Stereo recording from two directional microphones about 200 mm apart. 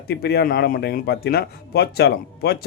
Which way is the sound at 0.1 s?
55° left (ahead or behind).